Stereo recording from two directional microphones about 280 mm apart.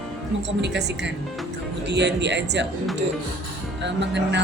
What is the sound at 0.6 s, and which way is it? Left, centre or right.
A woman's voice, right.